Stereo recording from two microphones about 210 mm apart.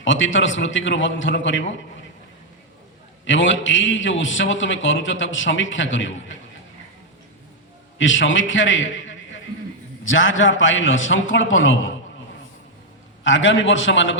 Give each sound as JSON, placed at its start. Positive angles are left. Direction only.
{"t": 0.0, "sound": "a man's voice", "side_deg": 65}
{"t": 3.2, "sound": "a man's voice", "side_deg": 65}
{"t": 7.9, "sound": "a man's voice", "side_deg": 65}
{"t": 13.2, "sound": "a man's voice", "side_deg": 65}